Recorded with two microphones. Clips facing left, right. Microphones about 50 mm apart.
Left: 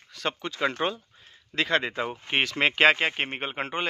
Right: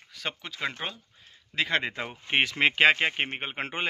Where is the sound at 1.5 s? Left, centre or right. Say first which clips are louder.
Left 2 dB; centre.